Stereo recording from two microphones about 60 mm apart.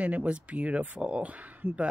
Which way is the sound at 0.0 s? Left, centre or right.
Right.